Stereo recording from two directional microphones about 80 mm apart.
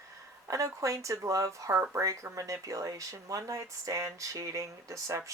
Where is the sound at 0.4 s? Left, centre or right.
Right.